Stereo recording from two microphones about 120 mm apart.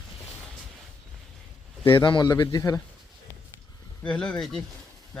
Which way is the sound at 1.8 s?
45° left (ahead or behind).